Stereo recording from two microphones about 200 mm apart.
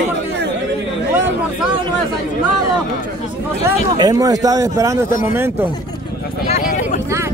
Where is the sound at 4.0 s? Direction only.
15° right (ahead or behind).